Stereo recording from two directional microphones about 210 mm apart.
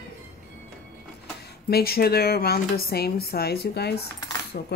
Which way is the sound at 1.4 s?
50° left (ahead or behind).